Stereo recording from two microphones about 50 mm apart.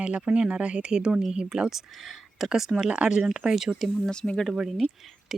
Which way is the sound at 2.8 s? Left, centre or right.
Right.